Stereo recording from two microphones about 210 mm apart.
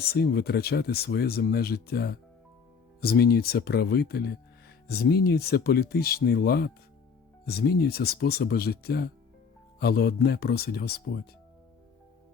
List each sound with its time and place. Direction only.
0.0 s speech: 50° left (ahead or behind)